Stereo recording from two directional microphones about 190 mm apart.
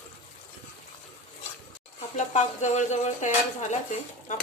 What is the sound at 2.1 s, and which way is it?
Speech, 40° left (ahead or behind).